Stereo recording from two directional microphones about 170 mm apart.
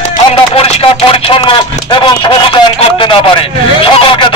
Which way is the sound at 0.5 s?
35° left (ahead or behind).